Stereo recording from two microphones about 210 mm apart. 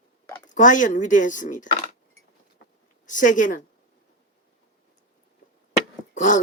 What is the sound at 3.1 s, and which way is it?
Speech, 40° left (ahead or behind).